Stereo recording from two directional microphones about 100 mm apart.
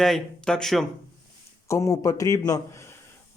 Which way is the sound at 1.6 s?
30° left (ahead or behind).